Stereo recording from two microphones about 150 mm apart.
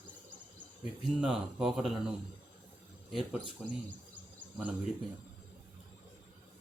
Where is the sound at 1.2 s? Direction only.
5° right (ahead or behind).